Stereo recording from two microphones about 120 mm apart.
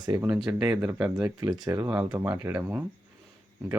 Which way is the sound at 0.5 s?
15° right (ahead or behind).